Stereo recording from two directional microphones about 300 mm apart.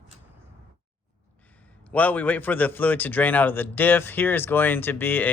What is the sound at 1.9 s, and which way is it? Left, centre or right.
Speech, centre.